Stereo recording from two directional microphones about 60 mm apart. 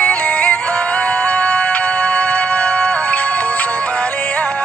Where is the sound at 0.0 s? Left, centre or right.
Left.